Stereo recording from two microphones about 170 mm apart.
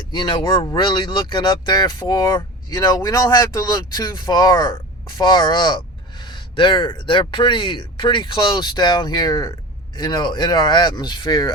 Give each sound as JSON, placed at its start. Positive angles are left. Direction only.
{"t": 0.1, "sound": "speech", "side_deg": 25}